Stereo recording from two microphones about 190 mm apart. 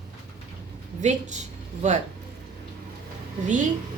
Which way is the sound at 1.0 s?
40° right (ahead or behind).